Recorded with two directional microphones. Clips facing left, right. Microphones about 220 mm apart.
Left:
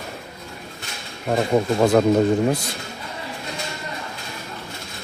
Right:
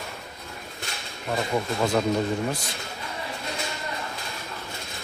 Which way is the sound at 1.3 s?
45° left (ahead or behind).